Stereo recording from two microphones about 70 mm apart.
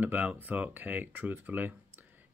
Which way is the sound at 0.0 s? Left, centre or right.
Right.